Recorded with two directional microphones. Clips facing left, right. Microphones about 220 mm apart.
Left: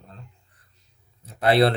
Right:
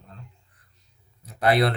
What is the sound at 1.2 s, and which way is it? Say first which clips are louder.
Speech: left 3 dB; 30° left (ahead or behind).